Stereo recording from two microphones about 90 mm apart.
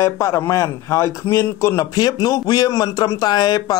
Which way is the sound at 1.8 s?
45° left (ahead or behind).